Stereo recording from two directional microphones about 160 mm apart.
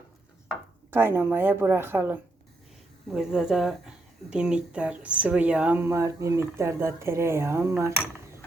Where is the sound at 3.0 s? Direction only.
Centre (ahead or behind).